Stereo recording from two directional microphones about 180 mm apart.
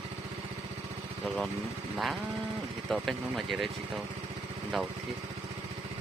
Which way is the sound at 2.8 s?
Centre (ahead or behind).